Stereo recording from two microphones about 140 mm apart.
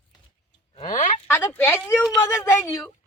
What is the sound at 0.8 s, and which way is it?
Speech, 60° left (ahead or behind).